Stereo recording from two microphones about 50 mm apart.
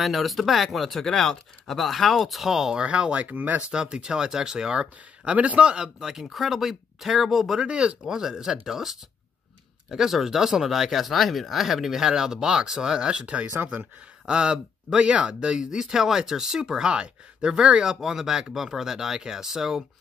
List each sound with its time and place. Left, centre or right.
0.0 s speech: centre; by 3.6 s right
3.7 s speech: centre
5.9 s speech: centre
7.6 s speech: centre